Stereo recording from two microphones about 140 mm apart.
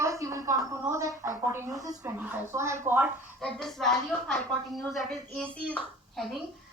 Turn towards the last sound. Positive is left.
turn(degrees=0)  # may be behind; listen again after turning